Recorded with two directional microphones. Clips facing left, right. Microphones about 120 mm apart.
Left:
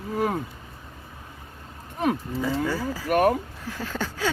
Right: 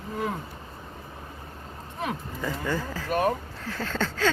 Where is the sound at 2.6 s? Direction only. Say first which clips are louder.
Left 3 dB; 10° left (ahead or behind).